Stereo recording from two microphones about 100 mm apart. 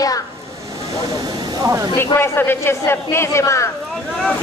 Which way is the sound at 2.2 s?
25° left (ahead or behind).